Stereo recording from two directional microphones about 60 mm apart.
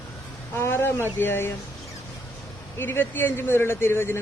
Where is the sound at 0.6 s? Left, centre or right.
Left.